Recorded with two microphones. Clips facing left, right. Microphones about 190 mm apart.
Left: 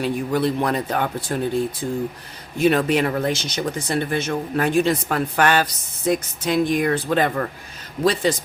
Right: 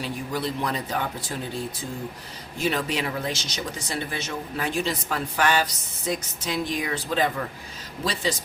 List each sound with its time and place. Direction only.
0.0 s speech: 55° left (ahead or behind)